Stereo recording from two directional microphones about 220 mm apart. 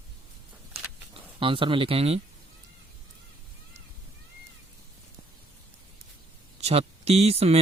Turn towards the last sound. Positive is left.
turn(degrees=-30)  # may be behind; listen again after turning